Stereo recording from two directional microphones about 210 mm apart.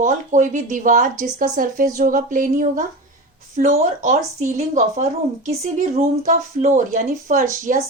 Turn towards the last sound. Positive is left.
turn(degrees=-35)  # may be behind; listen again after turning